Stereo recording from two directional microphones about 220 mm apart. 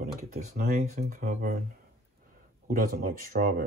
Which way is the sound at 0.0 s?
40° right (ahead or behind).